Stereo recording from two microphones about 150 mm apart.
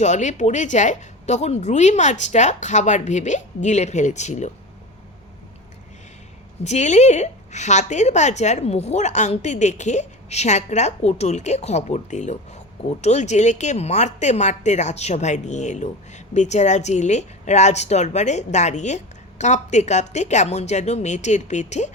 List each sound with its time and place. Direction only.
0.0 s a woman's voice: 55° left (ahead or behind)
6.7 s a woman's voice: 50° left (ahead or behind)